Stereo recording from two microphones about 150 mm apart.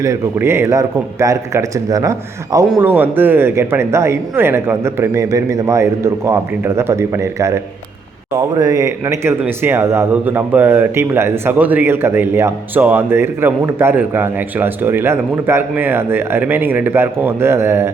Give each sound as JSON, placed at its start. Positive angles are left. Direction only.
{"t": 0.0, "sound": "a man's voice", "side_deg": -20}
{"t": 2.8, "sound": "a man's voice", "side_deg": -15}